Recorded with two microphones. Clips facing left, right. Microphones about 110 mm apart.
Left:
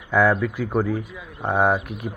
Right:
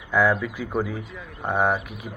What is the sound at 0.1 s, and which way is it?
A man's voice, centre (ahead or behind).